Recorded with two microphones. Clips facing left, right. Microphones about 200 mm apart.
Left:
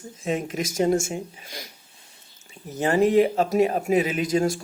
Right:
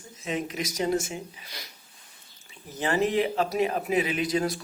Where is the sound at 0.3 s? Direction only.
45° left (ahead or behind).